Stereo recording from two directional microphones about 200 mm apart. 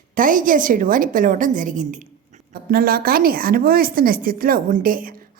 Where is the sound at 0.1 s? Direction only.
40° right (ahead or behind).